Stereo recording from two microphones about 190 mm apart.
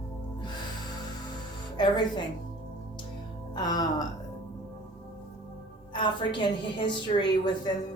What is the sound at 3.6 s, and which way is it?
Speech, 20° left (ahead or behind).